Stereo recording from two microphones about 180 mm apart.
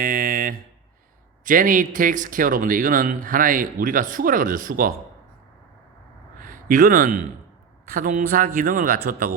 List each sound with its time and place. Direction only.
0.0 s a sound: 50° right (ahead or behind)
1.5 s a man's voice: 50° right (ahead or behind)
6.4 s a man's voice: 45° right (ahead or behind)